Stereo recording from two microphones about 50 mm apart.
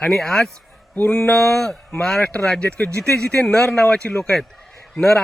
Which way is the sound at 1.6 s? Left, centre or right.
Centre.